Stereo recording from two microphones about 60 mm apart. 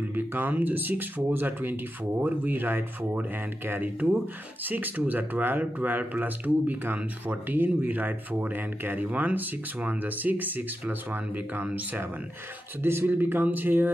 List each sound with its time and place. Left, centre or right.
0.1 s speech: right
12.8 s speech: right